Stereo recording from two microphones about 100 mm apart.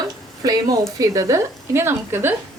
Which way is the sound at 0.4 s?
40° right (ahead or behind).